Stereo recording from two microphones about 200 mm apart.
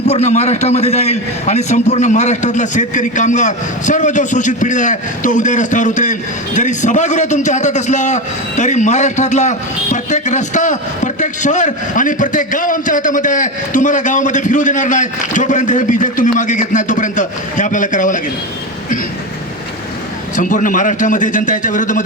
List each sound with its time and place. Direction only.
0.1 s a man's voice: 35° left (ahead or behind)
20.3 s a man's voice: 40° left (ahead or behind)